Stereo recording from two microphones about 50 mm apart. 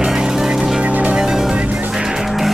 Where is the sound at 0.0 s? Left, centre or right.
Centre.